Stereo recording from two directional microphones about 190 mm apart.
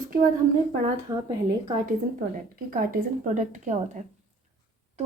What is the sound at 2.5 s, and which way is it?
A woman's voice, 50° right (ahead or behind).